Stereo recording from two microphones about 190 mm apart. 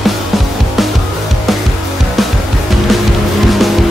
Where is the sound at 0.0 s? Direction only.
Centre (ahead or behind).